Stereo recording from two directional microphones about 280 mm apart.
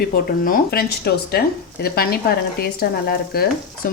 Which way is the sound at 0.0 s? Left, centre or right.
Left.